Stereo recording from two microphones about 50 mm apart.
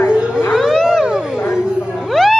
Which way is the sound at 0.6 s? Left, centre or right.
Centre.